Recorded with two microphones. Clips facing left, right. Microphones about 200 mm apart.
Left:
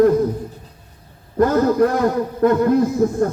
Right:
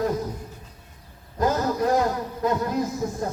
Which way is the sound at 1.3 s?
60° left (ahead or behind).